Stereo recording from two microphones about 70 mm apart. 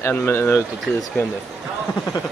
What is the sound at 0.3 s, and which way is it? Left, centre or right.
Speech, left.